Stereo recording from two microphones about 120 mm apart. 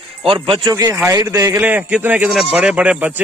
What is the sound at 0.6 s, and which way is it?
A man's voice, 30° right (ahead or behind).